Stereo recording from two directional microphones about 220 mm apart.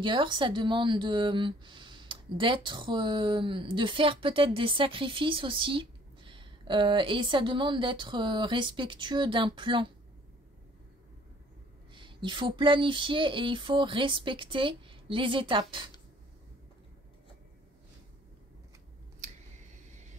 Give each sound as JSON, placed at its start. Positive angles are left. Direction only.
{"t": 0.0, "sound": "a woman's voice", "side_deg": -20}
{"t": 11.9, "sound": "a woman's voice", "side_deg": -20}
{"t": 19.2, "sound": "a sound", "side_deg": -35}